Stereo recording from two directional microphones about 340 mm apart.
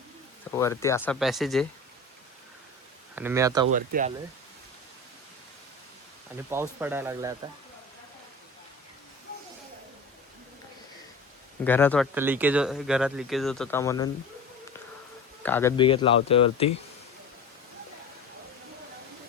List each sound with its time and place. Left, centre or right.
0.5 s speech: centre
3.2 s speech: centre
3.7 s speech: right
6.5 s speech: centre
11.6 s speech: centre
12.1 s speech: centre
15.4 s speech: centre